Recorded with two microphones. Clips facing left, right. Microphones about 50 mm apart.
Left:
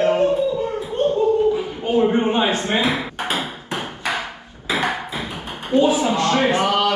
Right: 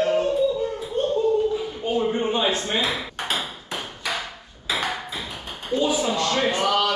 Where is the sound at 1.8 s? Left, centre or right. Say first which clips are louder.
Left 6 dB; left.